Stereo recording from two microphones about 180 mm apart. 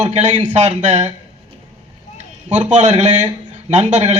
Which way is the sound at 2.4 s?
40° right (ahead or behind).